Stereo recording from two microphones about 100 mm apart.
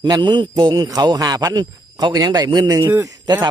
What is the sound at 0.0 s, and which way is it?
A man's voice, 50° right (ahead or behind).